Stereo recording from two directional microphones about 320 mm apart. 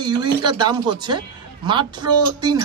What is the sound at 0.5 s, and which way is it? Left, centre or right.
A man's voice, centre.